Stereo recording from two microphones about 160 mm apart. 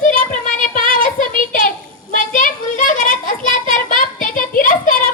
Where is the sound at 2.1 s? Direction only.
60° left (ahead or behind).